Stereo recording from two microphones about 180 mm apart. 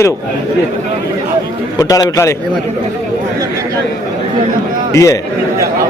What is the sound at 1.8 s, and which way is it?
Speech, 15° left (ahead or behind).